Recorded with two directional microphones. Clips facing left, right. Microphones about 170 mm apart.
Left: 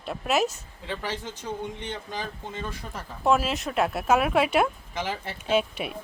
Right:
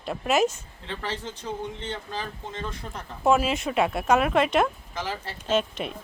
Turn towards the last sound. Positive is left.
turn(degrees=10)  # may be behind; listen again after turning